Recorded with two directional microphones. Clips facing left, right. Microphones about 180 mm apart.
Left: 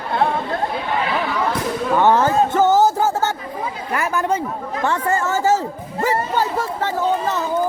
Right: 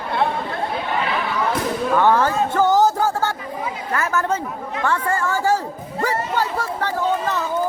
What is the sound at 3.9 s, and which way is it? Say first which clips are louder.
A woman's voice: left 2 dB; 15° left (ahead or behind).